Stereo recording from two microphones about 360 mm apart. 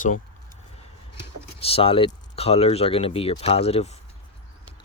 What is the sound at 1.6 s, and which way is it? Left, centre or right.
Speech, centre.